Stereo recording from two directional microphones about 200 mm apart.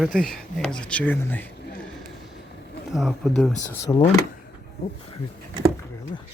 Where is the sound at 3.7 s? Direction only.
15° left (ahead or behind).